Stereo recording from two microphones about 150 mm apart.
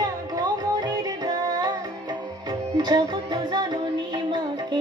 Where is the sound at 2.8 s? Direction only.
30° right (ahead or behind).